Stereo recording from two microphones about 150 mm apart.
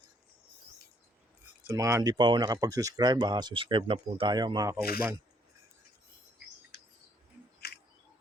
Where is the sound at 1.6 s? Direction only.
20° right (ahead or behind).